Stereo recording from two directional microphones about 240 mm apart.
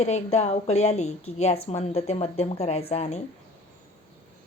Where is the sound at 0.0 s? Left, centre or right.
Left.